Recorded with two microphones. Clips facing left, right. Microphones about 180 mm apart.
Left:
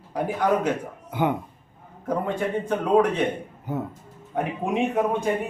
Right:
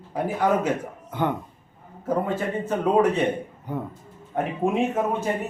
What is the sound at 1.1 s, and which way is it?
Speech, 10° left (ahead or behind).